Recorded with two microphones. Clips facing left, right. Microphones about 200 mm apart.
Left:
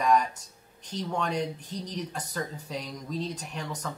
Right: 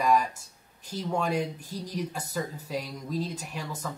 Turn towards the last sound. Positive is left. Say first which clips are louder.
# even
turn(degrees=-5)  # may be behind; listen again after turning